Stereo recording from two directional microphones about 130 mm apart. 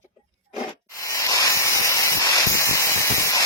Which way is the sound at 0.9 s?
25° left (ahead or behind).